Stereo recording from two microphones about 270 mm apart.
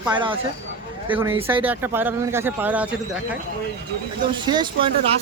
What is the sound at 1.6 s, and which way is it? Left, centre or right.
Speech, centre.